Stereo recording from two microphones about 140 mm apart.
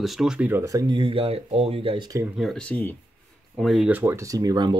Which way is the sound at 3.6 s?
Centre (ahead or behind).